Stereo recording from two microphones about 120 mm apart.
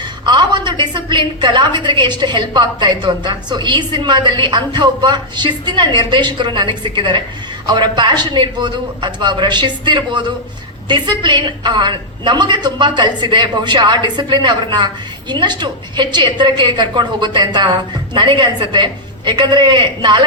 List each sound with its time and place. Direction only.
0.0 s a woman's voice: 40° right (ahead or behind)